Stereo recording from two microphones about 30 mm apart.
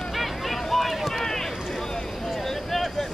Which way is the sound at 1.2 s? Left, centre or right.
Centre.